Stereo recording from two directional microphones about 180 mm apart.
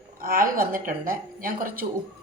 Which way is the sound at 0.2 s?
50° right (ahead or behind).